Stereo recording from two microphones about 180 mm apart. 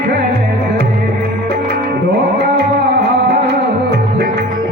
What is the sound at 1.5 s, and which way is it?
Tabla, 65° right (ahead or behind).